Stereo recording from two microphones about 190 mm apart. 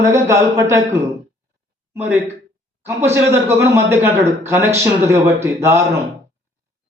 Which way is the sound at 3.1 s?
15° right (ahead or behind).